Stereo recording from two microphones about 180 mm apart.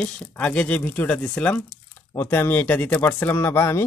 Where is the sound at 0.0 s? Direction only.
5° left (ahead or behind).